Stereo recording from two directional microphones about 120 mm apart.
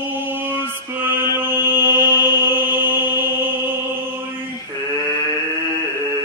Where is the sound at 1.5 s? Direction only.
20° right (ahead or behind).